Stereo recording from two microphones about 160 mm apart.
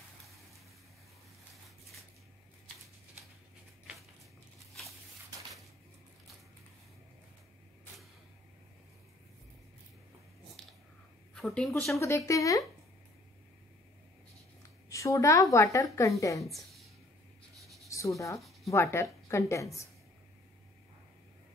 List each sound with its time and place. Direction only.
11.3 s a woman's voice: 5° left (ahead or behind)
12.3 s a woman's voice: 20° left (ahead or behind)
14.9 s a woman's voice: 20° left (ahead or behind)
16.4 s a sound: centre (ahead or behind)
17.8 s a woman's voice: 20° left (ahead or behind)